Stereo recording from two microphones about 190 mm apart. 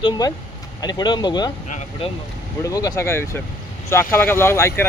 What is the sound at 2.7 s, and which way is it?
Speech, 20° left (ahead or behind).